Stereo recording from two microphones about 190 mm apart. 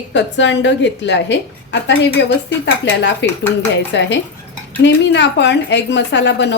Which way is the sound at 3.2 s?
70° left (ahead or behind).